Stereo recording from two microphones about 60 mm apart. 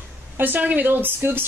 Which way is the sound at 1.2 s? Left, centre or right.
Right.